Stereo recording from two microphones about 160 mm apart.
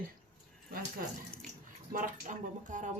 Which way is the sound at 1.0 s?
60° right (ahead or behind).